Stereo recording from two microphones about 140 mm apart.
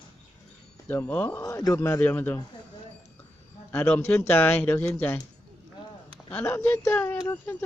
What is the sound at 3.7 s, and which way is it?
Speech, 15° left (ahead or behind).